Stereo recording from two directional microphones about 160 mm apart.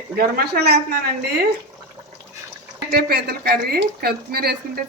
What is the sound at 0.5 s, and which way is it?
Speech, 90° right.